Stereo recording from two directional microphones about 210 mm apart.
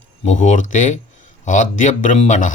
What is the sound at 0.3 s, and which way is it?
Speech, 35° left (ahead or behind).